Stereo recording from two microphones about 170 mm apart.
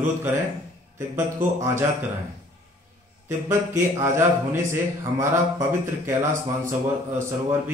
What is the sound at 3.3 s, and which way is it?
A man's voice, 15° right (ahead or behind).